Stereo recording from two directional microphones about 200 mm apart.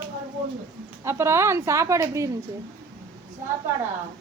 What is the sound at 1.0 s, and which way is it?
Speech, 15° right (ahead or behind).